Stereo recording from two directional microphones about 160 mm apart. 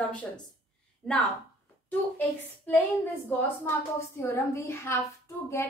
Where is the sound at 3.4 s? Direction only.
15° left (ahead or behind).